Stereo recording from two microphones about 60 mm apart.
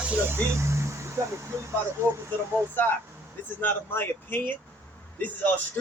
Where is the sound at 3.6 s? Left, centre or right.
Left.